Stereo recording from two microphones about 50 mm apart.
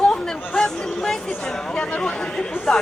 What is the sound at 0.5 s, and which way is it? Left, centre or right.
Speech, centre.